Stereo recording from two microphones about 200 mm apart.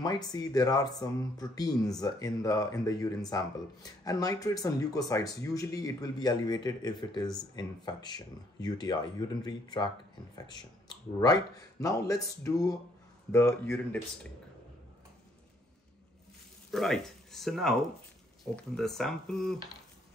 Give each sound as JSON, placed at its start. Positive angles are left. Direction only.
{"t": 0.0, "sound": "speech", "side_deg": 20}
{"t": 16.7, "sound": "speech", "side_deg": 0}